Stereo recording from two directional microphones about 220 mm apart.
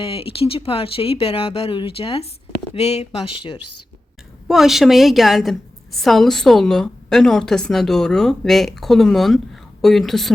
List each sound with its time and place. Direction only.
0.0 s speech: 25° left (ahead or behind)
3.2 s speech: 90° left
4.4 s a woman's voice: centre (ahead or behind)